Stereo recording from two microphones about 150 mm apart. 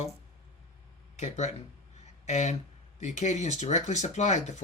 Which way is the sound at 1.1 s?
50° left (ahead or behind).